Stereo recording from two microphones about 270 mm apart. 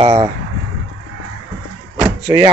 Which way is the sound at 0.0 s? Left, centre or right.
Centre.